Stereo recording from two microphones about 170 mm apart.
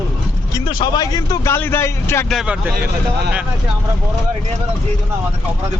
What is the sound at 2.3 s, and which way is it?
Speech, 5° right (ahead or behind).